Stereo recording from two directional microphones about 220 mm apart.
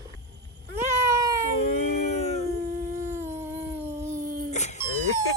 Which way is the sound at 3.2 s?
30° right (ahead or behind).